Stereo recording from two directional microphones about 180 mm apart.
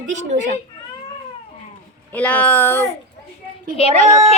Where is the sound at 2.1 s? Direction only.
10° left (ahead or behind).